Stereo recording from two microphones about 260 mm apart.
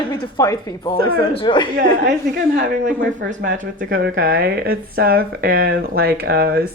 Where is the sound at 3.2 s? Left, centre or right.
Right.